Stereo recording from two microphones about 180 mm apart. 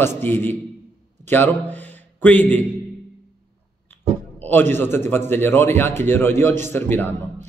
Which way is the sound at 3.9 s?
10° left (ahead or behind).